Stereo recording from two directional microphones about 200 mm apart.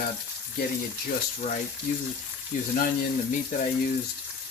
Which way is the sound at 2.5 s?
40° left (ahead or behind).